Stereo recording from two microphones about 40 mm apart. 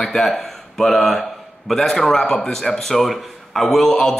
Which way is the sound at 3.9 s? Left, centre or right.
Centre.